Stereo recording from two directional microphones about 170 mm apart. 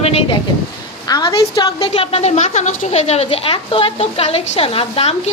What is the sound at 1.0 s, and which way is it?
Speech, 20° left (ahead or behind).